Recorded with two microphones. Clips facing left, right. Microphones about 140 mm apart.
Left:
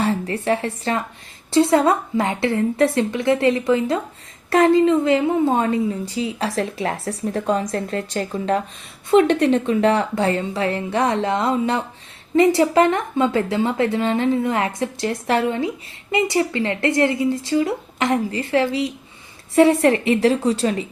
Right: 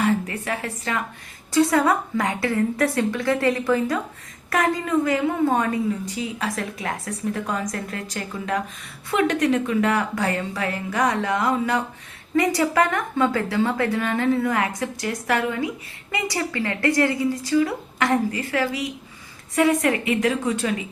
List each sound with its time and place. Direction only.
0.0 s a woman's voice: 30° left (ahead or behind)